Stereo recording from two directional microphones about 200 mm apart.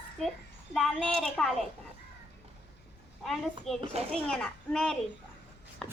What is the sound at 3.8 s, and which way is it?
Speech, 30° right (ahead or behind).